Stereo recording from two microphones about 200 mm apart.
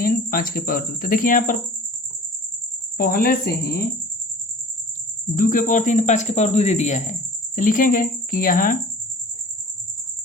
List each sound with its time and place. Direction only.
0.0 s speech: 45° left (ahead or behind)
3.0 s speech: 45° left (ahead or behind)
5.4 s a man's voice: 40° left (ahead or behind)